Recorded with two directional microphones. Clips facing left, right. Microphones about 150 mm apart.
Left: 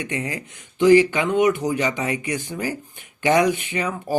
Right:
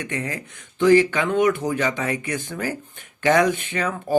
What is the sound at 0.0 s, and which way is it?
Speech, 15° left (ahead or behind).